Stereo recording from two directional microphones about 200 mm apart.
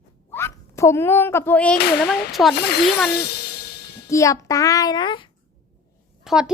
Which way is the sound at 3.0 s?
55° left (ahead or behind).